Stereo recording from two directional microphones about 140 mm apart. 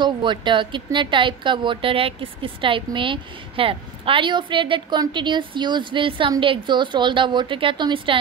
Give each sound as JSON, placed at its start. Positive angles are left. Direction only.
{"t": 0.0, "sound": "speech", "side_deg": -35}